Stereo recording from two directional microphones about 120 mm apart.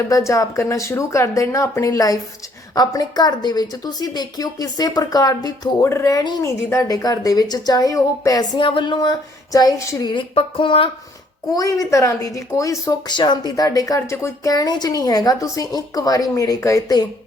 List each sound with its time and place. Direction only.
0.1 s speech: 25° left (ahead or behind)
8.5 s speech: 45° left (ahead or behind)
10.1 s speech: 45° left (ahead or behind)
11.5 s speech: 30° left (ahead or behind)